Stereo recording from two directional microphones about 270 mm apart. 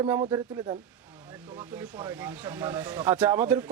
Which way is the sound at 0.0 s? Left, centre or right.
Centre.